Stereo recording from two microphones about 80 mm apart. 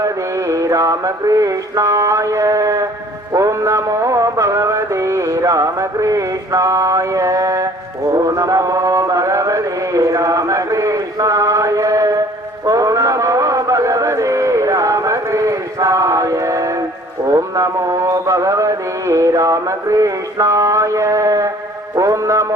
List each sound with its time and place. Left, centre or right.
0.0 s mantra: right
3.3 s music: right
8.1 s mantra: right
12.6 s music: right
17.2 s mantra: right
21.9 s music: right